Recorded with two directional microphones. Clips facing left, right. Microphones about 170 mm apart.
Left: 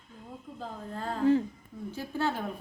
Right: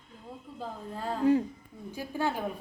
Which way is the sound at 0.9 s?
15° right (ahead or behind).